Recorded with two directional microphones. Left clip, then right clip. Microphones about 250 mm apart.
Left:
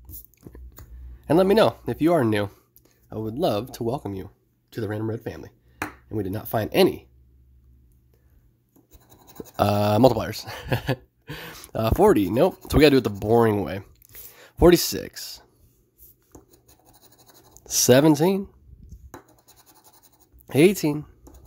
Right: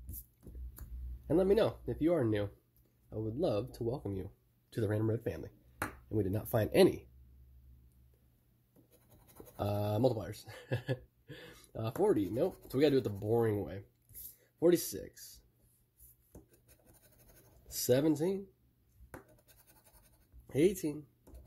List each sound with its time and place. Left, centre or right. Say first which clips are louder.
1.2 s speech: left 12 dB; left
4.1 s speech: left 8 dB; centre
9.6 s speech: left 15 dB; left
17.6 s speech: left 14 dB; left
20.4 s speech: left 12 dB; left